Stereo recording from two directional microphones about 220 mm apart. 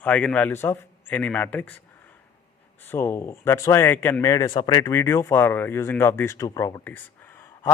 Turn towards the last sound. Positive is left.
turn(degrees=10)  # may be behind; listen again after turning